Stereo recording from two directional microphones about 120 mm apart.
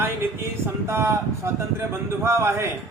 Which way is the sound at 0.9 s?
20° right (ahead or behind).